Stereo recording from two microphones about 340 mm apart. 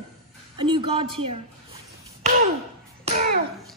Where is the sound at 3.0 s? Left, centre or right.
Right.